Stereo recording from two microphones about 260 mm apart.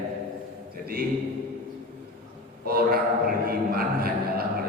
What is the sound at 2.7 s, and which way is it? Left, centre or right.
A man's voice, right.